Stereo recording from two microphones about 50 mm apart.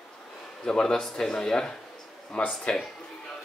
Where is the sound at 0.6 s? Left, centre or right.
Centre.